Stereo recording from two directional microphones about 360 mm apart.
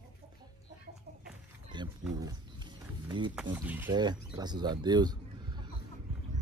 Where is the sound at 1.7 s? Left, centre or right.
Centre.